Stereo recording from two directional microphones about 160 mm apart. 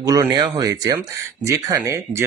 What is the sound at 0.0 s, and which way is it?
Speech, 20° right (ahead or behind).